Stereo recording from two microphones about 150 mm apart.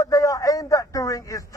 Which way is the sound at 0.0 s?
20° left (ahead or behind).